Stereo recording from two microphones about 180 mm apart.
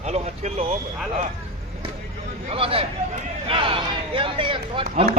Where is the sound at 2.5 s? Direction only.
30° right (ahead or behind).